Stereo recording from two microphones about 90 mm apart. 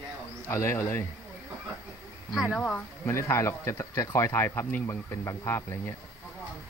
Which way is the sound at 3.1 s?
30° left (ahead or behind).